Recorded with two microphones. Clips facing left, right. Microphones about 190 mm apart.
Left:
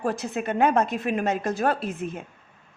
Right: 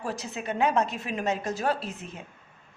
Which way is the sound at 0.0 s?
55° left (ahead or behind).